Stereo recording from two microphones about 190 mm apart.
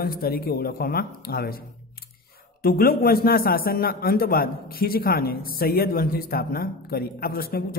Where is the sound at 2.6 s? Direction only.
50° left (ahead or behind).